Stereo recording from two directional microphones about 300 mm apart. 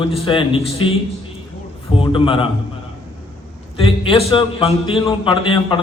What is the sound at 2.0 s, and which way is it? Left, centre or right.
Speech, centre.